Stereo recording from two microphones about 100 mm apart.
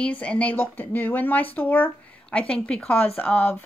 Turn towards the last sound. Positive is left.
turn(degrees=15)  # may be behind; listen again after turning